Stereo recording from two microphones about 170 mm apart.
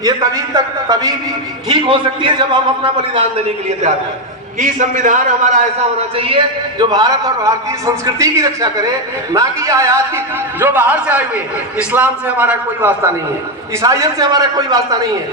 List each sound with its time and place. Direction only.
0.0 s a man's voice: 20° right (ahead or behind)
4.6 s a man's voice: 50° right (ahead or behind)
6.1 s a man's voice: 35° right (ahead or behind)